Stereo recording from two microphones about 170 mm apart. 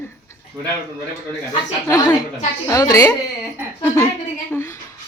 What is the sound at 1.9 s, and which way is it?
A woman's voice, 20° left (ahead or behind).